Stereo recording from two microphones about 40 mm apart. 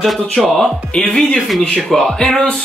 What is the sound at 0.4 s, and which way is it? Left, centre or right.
Speech, left.